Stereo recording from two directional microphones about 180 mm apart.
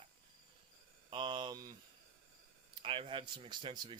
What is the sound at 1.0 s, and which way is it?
Speech, 25° right (ahead or behind).